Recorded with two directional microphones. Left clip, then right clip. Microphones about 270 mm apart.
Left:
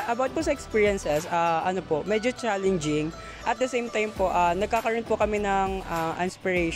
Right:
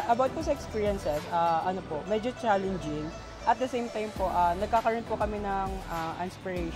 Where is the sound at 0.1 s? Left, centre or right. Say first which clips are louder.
Even; left.